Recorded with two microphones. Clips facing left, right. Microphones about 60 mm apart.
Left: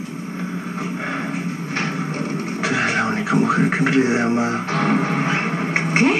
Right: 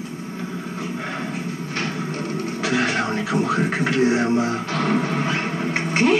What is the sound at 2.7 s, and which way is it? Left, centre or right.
Speech, left.